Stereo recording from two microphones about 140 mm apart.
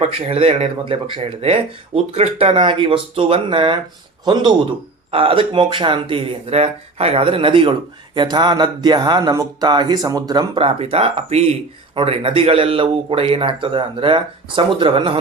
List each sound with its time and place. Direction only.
0.0 s speech: 45° right (ahead or behind)
5.1 s speech: 40° right (ahead or behind)